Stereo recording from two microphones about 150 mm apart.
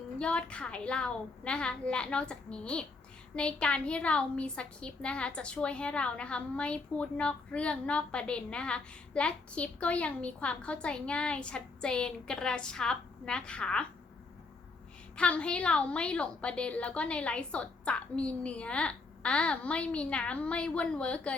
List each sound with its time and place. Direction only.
0.2 s a woman's voice: 5° left (ahead or behind)
15.1 s a woman's voice: 5° left (ahead or behind)